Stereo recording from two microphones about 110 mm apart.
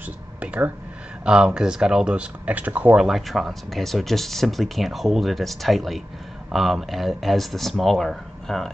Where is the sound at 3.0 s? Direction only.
Centre (ahead or behind).